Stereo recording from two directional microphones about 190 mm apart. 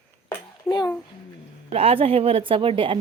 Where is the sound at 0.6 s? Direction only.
20° left (ahead or behind).